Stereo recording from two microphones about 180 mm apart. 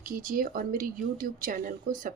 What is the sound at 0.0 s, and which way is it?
Speech, 50° right (ahead or behind).